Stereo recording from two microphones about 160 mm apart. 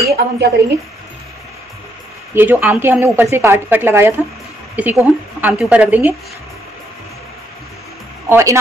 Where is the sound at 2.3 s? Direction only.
15° right (ahead or behind).